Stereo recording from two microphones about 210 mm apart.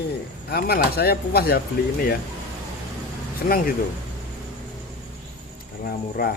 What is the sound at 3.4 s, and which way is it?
Speech, 45° left (ahead or behind).